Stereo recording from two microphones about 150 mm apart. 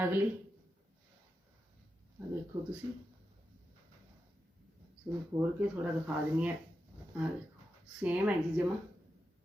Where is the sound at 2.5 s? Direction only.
20° right (ahead or behind).